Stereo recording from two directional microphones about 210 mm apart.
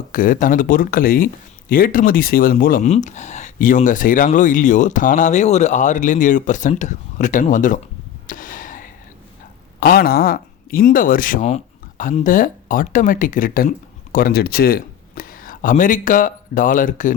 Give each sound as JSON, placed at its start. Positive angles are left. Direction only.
{"t": 0.1, "sound": "speech", "side_deg": 40}
{"t": 8.3, "sound": "a sound", "side_deg": 40}
{"t": 9.8, "sound": "speech", "side_deg": 45}